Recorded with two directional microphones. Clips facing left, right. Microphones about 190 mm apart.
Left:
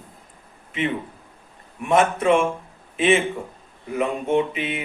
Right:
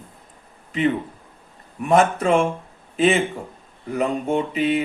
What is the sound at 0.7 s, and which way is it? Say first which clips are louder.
Speech: right 4 dB; 35° right (ahead or behind).